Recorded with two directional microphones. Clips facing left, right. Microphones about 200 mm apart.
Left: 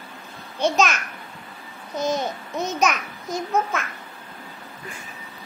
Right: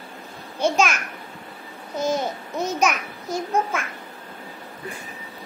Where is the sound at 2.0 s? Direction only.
10° right (ahead or behind).